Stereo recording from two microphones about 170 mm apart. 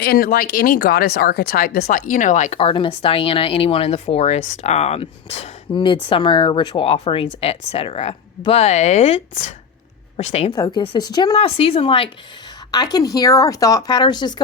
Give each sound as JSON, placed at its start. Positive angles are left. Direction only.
{"t": 0.0, "sound": "speech", "side_deg": 65}
{"t": 10.5, "sound": "speech", "side_deg": 25}